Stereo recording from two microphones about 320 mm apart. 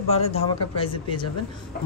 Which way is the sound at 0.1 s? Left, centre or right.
Centre.